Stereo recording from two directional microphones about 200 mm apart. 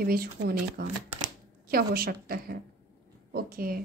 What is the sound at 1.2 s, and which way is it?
Camera, 50° right (ahead or behind).